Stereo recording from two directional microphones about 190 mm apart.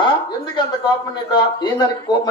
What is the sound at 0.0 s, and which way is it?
Speech, 25° left (ahead or behind).